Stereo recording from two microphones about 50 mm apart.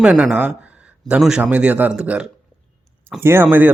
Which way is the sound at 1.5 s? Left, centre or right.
Right.